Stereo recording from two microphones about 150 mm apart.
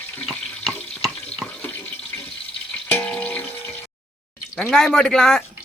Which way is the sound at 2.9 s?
10° left (ahead or behind).